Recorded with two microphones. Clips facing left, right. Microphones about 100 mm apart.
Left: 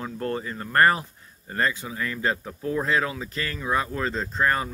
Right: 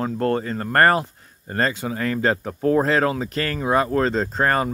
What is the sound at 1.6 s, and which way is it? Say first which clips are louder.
Speech: right 4 dB; 70° right (ahead or behind).